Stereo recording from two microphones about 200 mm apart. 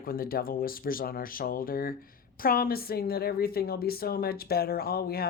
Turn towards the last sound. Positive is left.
turn(degrees=50)  # may be behind; listen again after turning